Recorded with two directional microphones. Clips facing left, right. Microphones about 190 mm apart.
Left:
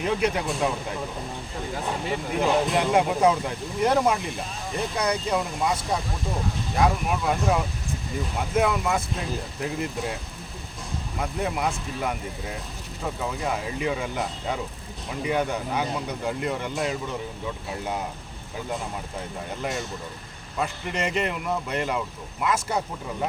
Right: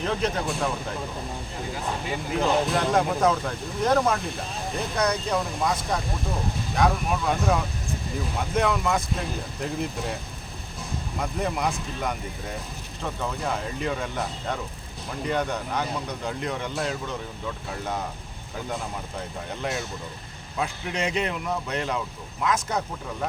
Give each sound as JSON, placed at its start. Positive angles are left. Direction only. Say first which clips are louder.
{"t": 0.0, "sound": "speech", "louder": "left 2 dB", "side_deg": 10}
{"t": 2.4, "sound": "speech", "louder": "left 1 dB", "side_deg": 10}
{"t": 11.2, "sound": "speech", "louder": "even", "side_deg": 5}
{"t": 20.6, "sound": "speech", "louder": "even", "side_deg": 0}